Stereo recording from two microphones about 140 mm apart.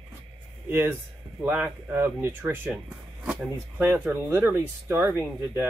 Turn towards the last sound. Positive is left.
turn(degrees=-15)  # may be behind; listen again after turning